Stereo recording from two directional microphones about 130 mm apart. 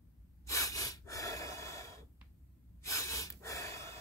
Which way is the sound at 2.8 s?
25° left (ahead or behind).